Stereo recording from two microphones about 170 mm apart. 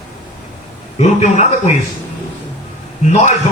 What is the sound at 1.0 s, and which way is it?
Speech, 40° left (ahead or behind).